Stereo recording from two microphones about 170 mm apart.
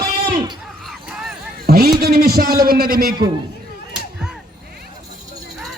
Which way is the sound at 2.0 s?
65° right (ahead or behind).